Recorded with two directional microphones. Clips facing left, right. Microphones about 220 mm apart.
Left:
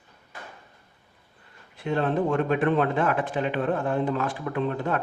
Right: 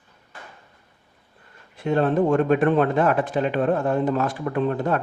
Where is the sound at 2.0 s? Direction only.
45° right (ahead or behind).